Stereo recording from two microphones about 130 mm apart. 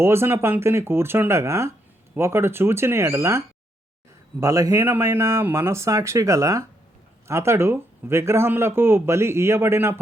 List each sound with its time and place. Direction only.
0.0 s speech: 20° right (ahead or behind)